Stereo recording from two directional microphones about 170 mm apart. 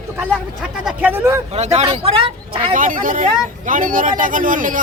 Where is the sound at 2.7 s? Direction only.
50° right (ahead or behind).